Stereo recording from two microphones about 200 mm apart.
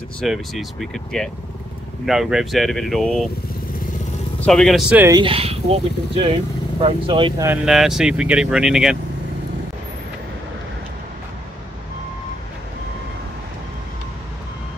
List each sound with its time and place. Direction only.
0.2 s speech: centre (ahead or behind)
4.4 s speech: centre (ahead or behind)
5.1 s speech: 25° right (ahead or behind)
7.4 s speech: centre (ahead or behind)